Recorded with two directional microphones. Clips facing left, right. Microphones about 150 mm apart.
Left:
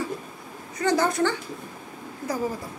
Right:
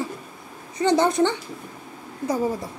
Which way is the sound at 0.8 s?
20° right (ahead or behind).